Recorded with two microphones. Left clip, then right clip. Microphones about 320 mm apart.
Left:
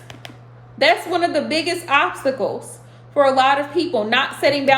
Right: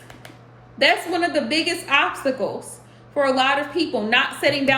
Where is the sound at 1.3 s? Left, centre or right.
Left.